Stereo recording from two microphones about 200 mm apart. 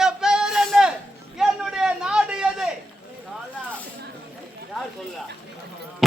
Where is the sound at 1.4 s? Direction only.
5° right (ahead or behind).